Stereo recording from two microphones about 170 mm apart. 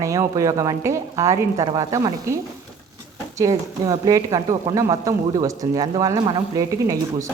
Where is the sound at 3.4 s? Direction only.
20° right (ahead or behind).